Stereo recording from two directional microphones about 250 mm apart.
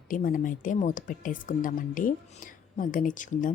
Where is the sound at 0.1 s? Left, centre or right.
Left.